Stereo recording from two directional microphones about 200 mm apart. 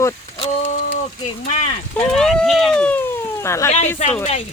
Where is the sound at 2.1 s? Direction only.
5° left (ahead or behind).